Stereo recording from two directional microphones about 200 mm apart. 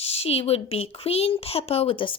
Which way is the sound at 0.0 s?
30° left (ahead or behind).